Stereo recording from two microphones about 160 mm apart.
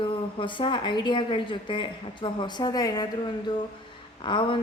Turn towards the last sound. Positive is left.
turn(degrees=30)  # may be behind; listen again after turning